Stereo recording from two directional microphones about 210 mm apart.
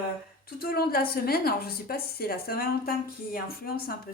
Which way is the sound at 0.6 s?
45° left (ahead or behind).